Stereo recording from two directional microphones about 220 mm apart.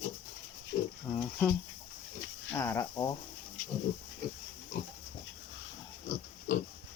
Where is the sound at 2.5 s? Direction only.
10° left (ahead or behind).